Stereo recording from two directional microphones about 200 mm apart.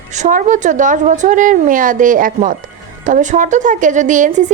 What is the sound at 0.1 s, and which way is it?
A woman's voice, 40° right (ahead or behind).